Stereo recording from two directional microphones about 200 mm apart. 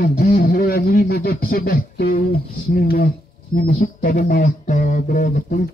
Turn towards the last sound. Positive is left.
turn(degrees=40)  # may be behind; listen again after turning